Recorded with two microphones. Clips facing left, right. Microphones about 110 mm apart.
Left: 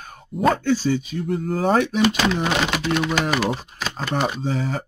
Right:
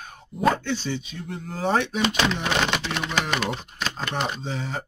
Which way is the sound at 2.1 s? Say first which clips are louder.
Left 3 dB; 5° left (ahead or behind).